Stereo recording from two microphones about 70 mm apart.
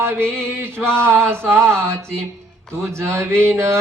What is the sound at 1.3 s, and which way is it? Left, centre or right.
Mantra, right.